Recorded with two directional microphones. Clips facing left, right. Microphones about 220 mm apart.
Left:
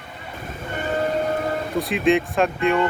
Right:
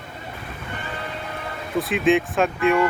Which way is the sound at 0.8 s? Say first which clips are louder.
Left 14 dB; 45° left (ahead or behind).